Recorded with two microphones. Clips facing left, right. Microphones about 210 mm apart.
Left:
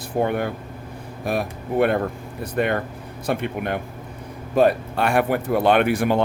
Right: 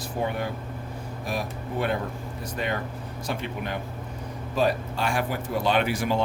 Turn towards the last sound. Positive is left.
turn(degrees=55)  # may be behind; listen again after turning